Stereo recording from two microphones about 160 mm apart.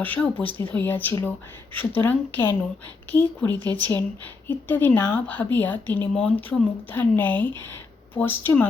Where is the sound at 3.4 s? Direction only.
5° left (ahead or behind).